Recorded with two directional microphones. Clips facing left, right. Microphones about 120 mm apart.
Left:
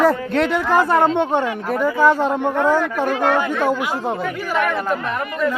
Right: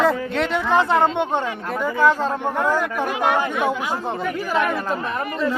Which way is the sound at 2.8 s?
15° right (ahead or behind).